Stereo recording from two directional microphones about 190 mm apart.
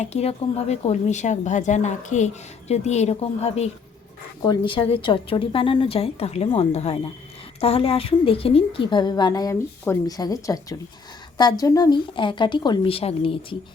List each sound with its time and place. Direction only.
0.0 s a woman's voice: 35° left (ahead or behind)